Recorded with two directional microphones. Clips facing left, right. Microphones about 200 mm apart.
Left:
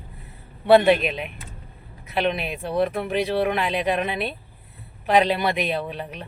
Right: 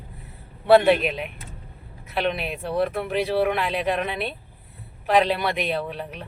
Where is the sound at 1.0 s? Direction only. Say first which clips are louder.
Even; centre (ahead or behind).